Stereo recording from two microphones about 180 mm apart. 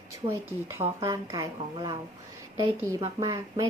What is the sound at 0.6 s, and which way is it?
A woman's voice, 15° right (ahead or behind).